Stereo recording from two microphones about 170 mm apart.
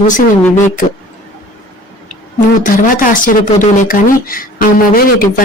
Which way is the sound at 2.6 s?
55° left (ahead or behind).